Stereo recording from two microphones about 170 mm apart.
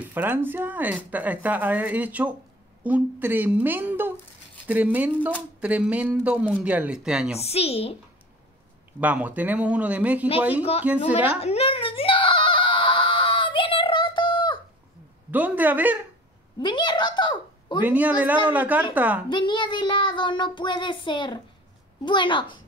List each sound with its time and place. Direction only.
0.0 s speech: 10° right (ahead or behind)
7.3 s a woman's voice: 35° left (ahead or behind)
9.0 s speech: 10° right (ahead or behind)
10.6 s a woman's voice: 35° left (ahead or behind)
10.9 s speech: 10° right (ahead or behind)
11.3 s wail: 35° left (ahead or behind)
15.3 s speech: 10° right (ahead or behind)
16.5 s a woman's voice: 25° left (ahead or behind)
17.8 s speech: 10° right (ahead or behind)
19.2 s child singing: 30° left (ahead or behind)